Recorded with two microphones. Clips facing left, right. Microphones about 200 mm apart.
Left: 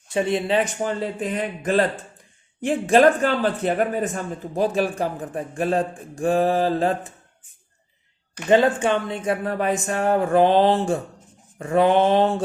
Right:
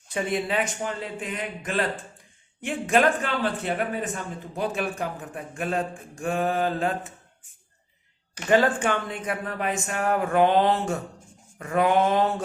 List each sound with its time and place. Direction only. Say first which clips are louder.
0.1 s a man's voice: left 5 dB; 25° left (ahead or behind)
8.4 s a man's voice: left 4 dB; 20° left (ahead or behind)
11.6 s mantra: left 4 dB; 30° left (ahead or behind)